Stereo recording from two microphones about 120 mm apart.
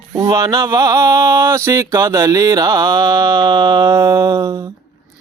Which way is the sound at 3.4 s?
40° right (ahead or behind).